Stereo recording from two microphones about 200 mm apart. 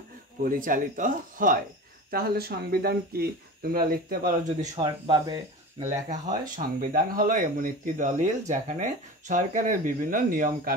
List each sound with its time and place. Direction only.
0.4 s speech: 45° right (ahead or behind)
4.7 s speech: 20° right (ahead or behind)
6.0 s speech: 40° right (ahead or behind)